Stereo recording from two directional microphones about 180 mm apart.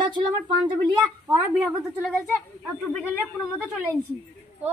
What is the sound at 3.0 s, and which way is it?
Speech, 15° left (ahead or behind).